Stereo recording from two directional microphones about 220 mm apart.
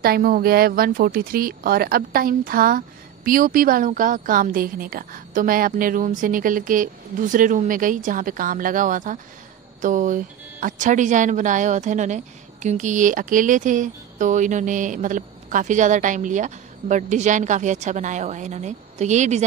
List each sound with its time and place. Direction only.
0.0 s speech: 40° right (ahead or behind)